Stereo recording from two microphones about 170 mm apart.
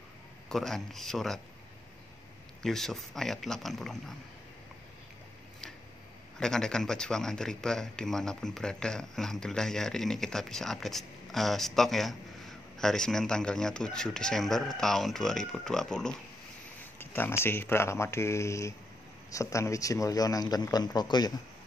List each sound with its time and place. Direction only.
0.5 s speech: centre (ahead or behind)
2.6 s speech: centre (ahead or behind)
6.4 s speech: 5° left (ahead or behind); by 21.3 s 25° left (ahead or behind)